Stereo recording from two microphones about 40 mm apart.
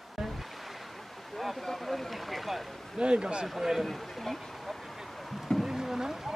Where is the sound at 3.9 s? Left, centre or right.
Centre.